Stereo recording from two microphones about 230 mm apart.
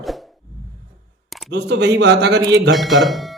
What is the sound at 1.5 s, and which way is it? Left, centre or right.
Speech, right.